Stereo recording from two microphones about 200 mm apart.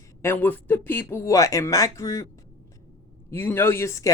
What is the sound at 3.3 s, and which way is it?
Speech, 10° left (ahead or behind).